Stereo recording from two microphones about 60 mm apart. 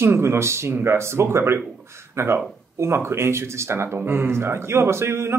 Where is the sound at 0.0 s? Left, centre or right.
Right.